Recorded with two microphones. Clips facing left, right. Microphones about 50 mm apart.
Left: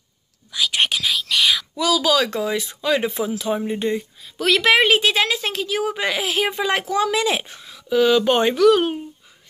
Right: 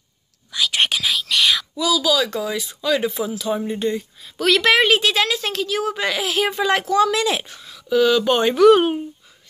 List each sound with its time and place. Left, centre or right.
0.5 s whispering: centre
1.8 s speech: left
4.2 s a woman's voice: centre; by 8.5 s left
8.5 s speech: right